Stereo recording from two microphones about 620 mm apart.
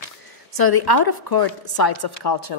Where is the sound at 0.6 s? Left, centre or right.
Left.